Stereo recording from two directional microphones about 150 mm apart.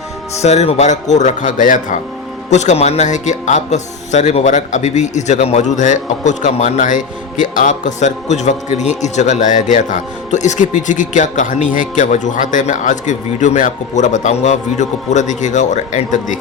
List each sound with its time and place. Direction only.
0.3 s a man's voice: 45° left (ahead or behind)